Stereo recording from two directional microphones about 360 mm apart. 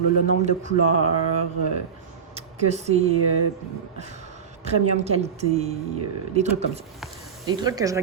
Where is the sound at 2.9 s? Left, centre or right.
Right.